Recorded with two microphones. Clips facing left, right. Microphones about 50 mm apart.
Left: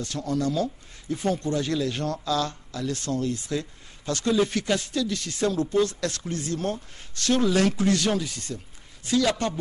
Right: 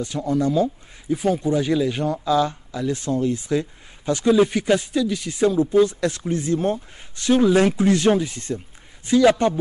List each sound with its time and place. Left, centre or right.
0.0 s a man's voice: centre